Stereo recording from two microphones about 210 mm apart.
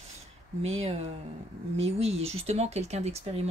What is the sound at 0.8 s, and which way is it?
Speech, 30° right (ahead or behind).